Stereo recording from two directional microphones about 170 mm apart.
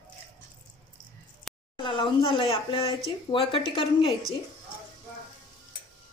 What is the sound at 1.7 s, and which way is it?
A woman's voice, 30° left (ahead or behind).